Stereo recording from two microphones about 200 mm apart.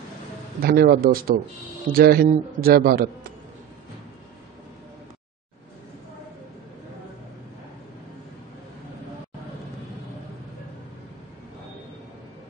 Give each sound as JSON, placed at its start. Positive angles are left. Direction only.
{"t": 0.6, "sound": "speech", "side_deg": -50}